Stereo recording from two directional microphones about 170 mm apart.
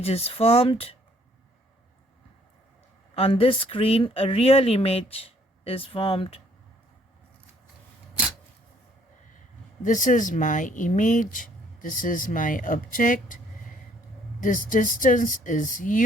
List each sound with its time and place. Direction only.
0.0 s speech: 40° left (ahead or behind)
3.2 s speech: 35° left (ahead or behind)
9.8 s speech: 50° left (ahead or behind)
14.4 s speech: 50° left (ahead or behind)